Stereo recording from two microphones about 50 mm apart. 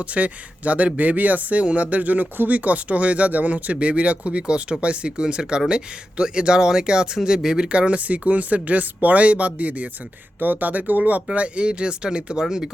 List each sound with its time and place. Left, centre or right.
0.0 s speech: right; by 7.7 s centre
7.7 s speech: right
11.3 s speech: right